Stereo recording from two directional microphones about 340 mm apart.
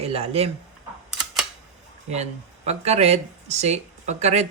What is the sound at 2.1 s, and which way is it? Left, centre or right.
Speech, centre.